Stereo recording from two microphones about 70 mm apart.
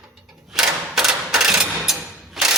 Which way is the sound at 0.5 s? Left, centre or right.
Centre.